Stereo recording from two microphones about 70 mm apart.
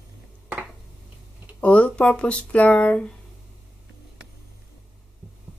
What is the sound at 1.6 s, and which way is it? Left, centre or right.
Speech, centre.